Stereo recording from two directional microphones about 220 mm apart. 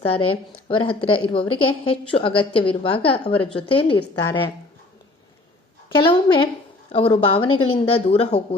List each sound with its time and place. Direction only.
0.3 s a woman's voice: 25° left (ahead or behind)
5.9 s a woman's voice: 20° left (ahead or behind)